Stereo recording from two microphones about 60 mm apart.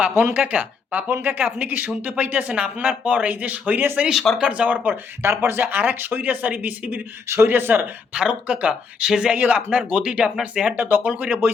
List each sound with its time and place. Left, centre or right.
0.3 s speech: right
4.1 s speech: centre
4.4 s speech: centre
5.2 s speech: right
7.3 s speech: right
8.1 s speech: centre
9.3 s speech: right
10.8 s speech: right